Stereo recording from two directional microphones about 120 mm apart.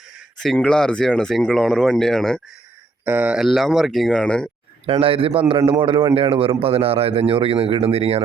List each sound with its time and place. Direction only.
0.4 s speech: 5° left (ahead or behind)
3.0 s speech: 20° right (ahead or behind)
3.3 s speech: centre (ahead or behind)
4.9 s a man's voice: 50° right (ahead or behind)